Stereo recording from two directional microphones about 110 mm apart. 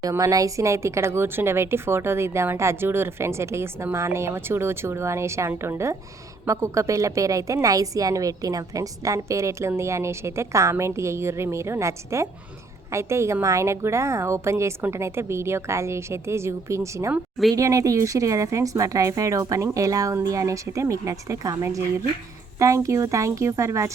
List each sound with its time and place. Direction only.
0.0 s a woman's voice: 30° right (ahead or behind)